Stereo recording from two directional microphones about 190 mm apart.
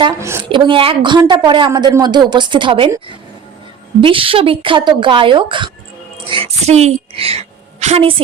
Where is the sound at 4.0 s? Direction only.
30° right (ahead or behind).